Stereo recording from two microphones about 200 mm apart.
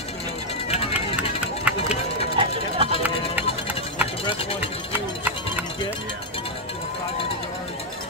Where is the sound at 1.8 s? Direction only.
30° left (ahead or behind).